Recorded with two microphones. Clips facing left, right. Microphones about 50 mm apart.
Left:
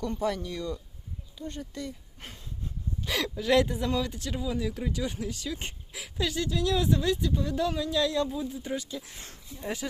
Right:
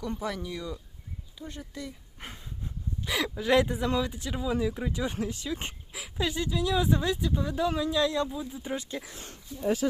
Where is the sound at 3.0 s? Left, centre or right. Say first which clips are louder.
Right 1 dB; centre.